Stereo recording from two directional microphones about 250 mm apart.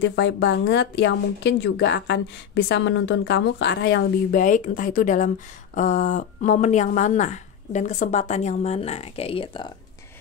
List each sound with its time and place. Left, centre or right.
0.0 s speech: left